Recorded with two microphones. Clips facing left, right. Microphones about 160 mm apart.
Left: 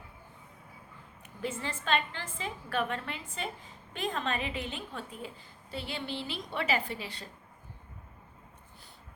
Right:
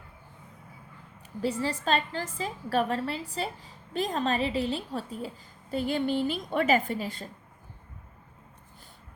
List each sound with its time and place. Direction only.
1.4 s a woman's voice: 35° right (ahead or behind)